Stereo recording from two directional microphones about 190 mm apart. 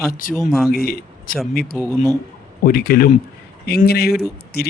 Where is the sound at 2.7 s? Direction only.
50° left (ahead or behind).